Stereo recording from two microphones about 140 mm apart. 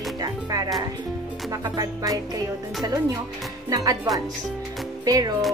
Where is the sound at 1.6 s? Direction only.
25° right (ahead or behind).